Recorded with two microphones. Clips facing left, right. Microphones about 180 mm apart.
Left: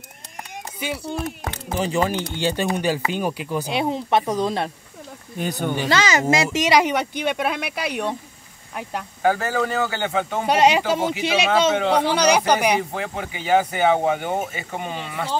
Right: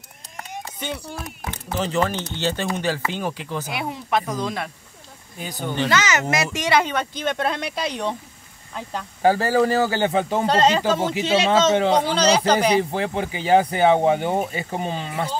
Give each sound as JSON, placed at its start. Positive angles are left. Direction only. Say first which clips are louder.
{"t": 0.7, "sound": "speech", "louder": "left 5 dB", "side_deg": 10}
{"t": 3.7, "sound": "speech", "louder": "left 4 dB", "side_deg": 25}
{"t": 5.4, "sound": "speech", "louder": "left 6 dB", "side_deg": 65}
{"t": 5.9, "sound": "speech", "louder": "left 3 dB", "side_deg": 30}
{"t": 9.2, "sound": "speech", "louder": "right 3 dB", "side_deg": -30}
{"t": 10.4, "sound": "speech", "louder": "left 2 dB", "side_deg": 10}
{"t": 12.9, "sound": "speech", "louder": "right 4 dB", "side_deg": -30}